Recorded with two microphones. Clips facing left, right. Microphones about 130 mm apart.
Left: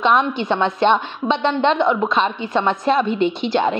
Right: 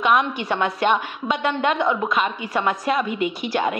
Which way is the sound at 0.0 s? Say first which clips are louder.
Left 3 dB; 25° left (ahead or behind).